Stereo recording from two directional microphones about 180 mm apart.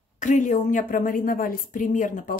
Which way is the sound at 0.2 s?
45° left (ahead or behind).